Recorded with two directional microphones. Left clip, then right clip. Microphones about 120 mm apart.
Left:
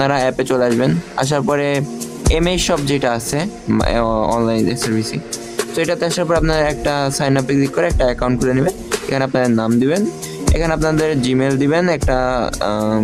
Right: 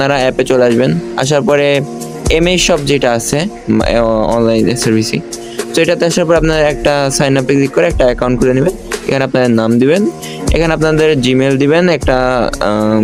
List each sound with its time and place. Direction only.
0.0 s speech: 40° right (ahead or behind)